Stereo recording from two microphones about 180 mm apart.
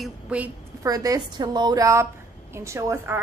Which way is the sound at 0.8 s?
20° right (ahead or behind).